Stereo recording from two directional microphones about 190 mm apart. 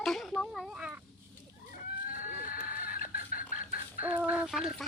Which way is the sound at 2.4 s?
45° left (ahead or behind).